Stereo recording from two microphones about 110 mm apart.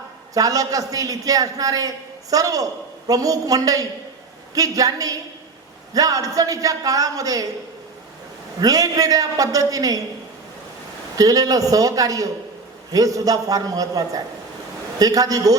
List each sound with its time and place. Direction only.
0.3 s a man's voice: 35° right (ahead or behind)
8.6 s a man's voice: 30° right (ahead or behind)
11.2 s a man's voice: 35° right (ahead or behind)